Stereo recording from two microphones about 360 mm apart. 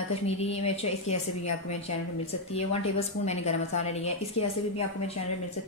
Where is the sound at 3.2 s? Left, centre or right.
Centre.